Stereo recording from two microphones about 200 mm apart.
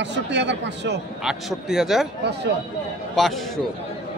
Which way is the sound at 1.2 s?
Centre (ahead or behind).